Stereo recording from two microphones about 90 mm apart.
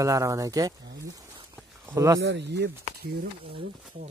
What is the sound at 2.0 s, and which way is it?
Speech, 35° right (ahead or behind).